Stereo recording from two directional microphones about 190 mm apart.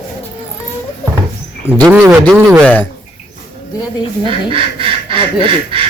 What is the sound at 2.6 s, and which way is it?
Speech, 10° left (ahead or behind).